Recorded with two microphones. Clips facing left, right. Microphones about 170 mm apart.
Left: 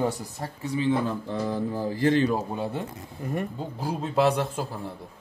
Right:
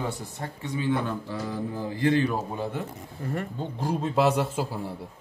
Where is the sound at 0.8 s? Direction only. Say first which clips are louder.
Left 2 dB; 30° left (ahead or behind).